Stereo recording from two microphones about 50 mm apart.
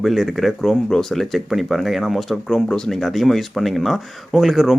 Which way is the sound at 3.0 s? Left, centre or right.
Centre.